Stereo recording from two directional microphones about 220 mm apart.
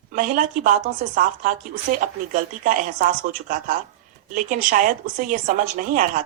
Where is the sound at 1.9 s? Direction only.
40° right (ahead or behind).